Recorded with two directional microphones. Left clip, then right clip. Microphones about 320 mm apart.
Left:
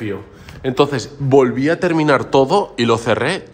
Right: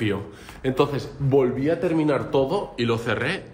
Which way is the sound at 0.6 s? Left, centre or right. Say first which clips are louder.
Left 6 dB; left.